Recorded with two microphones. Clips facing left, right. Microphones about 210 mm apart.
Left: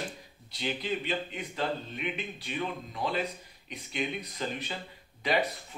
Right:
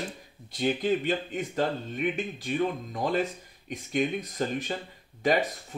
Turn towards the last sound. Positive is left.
turn(degrees=-45)  # may be behind; listen again after turning